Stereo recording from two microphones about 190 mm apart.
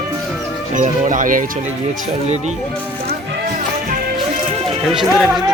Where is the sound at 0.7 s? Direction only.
40° right (ahead or behind).